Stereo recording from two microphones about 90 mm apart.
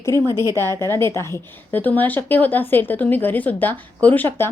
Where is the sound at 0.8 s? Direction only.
30° left (ahead or behind).